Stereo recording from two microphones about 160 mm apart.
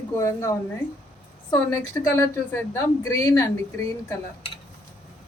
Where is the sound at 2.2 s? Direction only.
15° left (ahead or behind).